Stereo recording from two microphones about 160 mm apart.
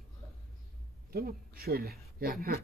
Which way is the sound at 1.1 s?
70° right (ahead or behind).